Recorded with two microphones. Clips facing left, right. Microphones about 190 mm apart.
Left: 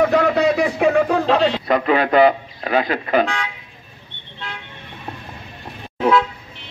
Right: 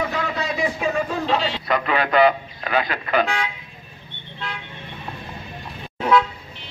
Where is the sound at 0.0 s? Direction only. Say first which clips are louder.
Left 10 dB; 65° left (ahead or behind).